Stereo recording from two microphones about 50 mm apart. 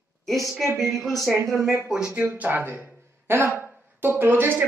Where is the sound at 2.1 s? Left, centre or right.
Right.